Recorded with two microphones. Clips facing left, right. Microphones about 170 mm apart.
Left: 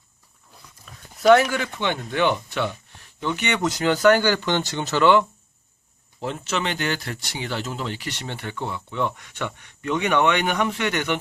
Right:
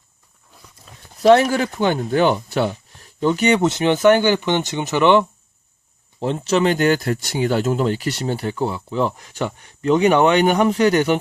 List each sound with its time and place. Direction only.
0.9 s a sound: 25° right (ahead or behind)
1.2 s speech: 30° right (ahead or behind)
6.1 s speech: 35° right (ahead or behind)